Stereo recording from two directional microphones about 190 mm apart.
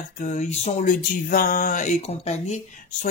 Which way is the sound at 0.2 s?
40° left (ahead or behind).